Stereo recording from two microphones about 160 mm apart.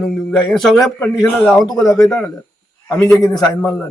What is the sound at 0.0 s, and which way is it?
A man's voice, 5° left (ahead or behind).